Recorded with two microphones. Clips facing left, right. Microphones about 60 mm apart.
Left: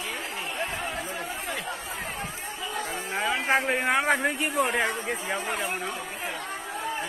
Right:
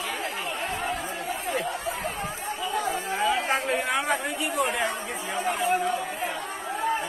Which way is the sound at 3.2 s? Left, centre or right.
Left.